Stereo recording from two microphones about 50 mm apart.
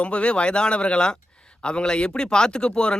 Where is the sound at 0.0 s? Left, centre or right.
Left.